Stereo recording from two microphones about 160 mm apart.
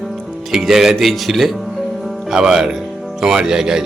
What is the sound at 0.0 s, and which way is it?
Speech, centre (ahead or behind).